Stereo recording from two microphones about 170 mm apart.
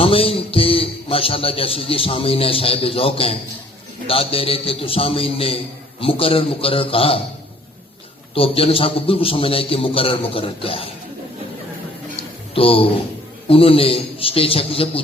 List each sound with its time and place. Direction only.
0.0 s a man's voice: 35° left (ahead or behind)
8.4 s a man's voice: 35° left (ahead or behind)
12.5 s a man's voice: 35° left (ahead or behind)